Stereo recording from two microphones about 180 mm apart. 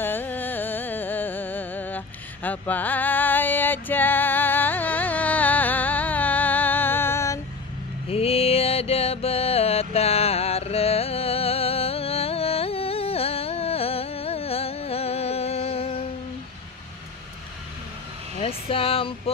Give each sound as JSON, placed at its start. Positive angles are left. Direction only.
{"t": 0.0, "sound": "music", "side_deg": 10}
{"t": 8.1, "sound": "mantra", "side_deg": 35}
{"t": 18.4, "sound": "a sound", "side_deg": 30}